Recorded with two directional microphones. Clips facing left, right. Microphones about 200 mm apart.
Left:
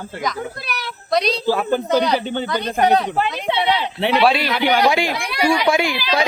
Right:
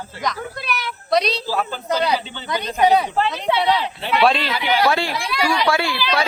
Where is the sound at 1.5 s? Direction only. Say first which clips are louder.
Left 6 dB; 60° left (ahead or behind).